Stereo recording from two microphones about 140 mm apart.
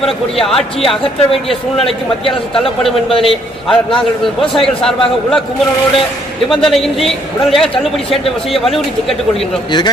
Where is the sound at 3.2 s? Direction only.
Centre (ahead or behind).